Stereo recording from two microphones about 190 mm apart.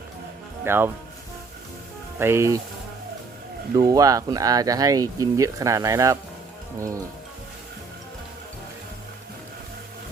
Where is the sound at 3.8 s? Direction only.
20° right (ahead or behind).